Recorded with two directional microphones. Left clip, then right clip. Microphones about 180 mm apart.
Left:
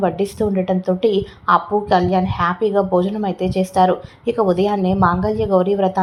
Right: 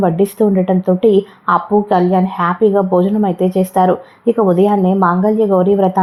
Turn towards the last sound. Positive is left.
turn(degrees=-25)  # may be behind; listen again after turning